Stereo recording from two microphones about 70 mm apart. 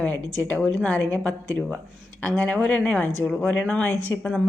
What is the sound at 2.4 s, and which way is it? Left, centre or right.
Speech, centre.